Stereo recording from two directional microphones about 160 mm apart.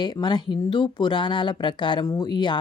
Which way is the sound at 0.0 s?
25° left (ahead or behind).